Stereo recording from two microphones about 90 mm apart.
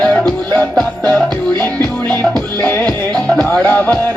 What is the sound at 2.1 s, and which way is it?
Music, 20° left (ahead or behind).